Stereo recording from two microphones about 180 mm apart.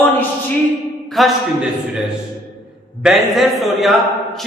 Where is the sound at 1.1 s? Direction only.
Centre (ahead or behind).